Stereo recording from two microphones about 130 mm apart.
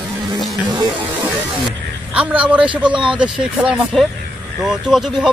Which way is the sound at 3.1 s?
10° right (ahead or behind).